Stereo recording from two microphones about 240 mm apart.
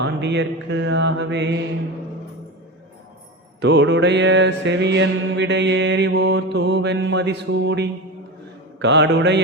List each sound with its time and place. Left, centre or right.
0.0 s music: right
3.6 s music: right